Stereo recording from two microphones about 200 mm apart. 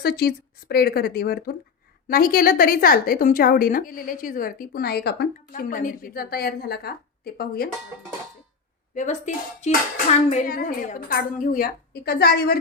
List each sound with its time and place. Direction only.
0.0 s a woman's voice: 50° left (ahead or behind)
9.0 s a woman's voice: 35° left (ahead or behind)